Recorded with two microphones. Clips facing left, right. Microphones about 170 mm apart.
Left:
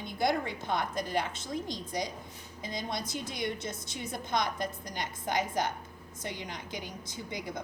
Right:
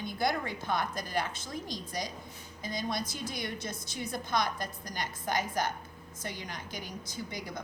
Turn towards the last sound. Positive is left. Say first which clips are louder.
# even
turn(degrees=20)  # may be behind; listen again after turning